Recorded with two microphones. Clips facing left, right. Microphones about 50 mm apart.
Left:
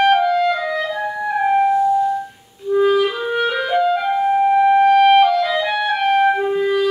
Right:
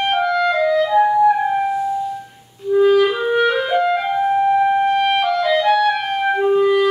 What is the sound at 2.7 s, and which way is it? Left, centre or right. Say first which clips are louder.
Clarinet: right 2 dB; centre.